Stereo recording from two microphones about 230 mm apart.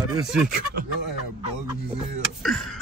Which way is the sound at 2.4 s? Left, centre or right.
Centre.